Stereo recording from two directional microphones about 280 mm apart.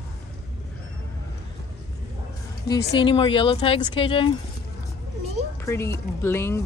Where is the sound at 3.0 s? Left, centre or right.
Centre.